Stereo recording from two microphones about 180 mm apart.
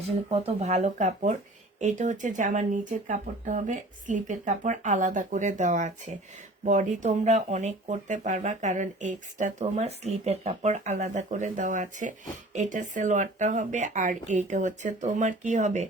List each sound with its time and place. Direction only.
0.3 s speech: 35° right (ahead or behind)